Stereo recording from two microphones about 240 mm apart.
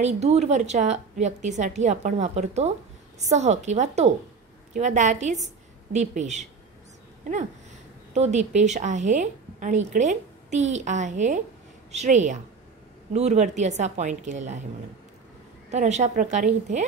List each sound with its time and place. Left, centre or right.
0.0 s a woman's voice: right
8.1 s a woman's voice: right
15.7 s a woman's voice: right